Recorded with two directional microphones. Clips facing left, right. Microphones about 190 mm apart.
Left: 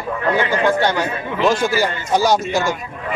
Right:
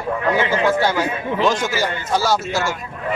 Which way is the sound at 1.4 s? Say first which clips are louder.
Left 3 dB; 10° left (ahead or behind).